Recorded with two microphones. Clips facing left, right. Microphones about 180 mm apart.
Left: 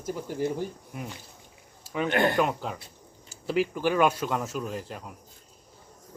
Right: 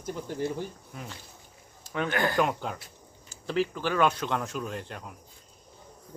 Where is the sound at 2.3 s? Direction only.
Centre (ahead or behind).